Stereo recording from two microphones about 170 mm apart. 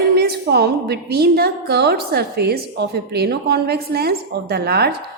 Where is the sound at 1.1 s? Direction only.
70° right (ahead or behind).